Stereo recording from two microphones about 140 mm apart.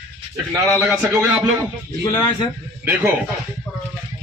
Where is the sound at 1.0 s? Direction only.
5° right (ahead or behind).